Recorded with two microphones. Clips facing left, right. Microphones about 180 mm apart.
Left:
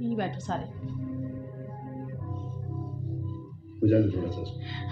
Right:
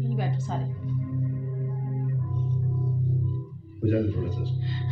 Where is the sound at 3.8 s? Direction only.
40° left (ahead or behind).